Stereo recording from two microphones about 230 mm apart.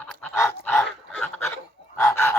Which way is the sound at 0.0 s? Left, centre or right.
Centre.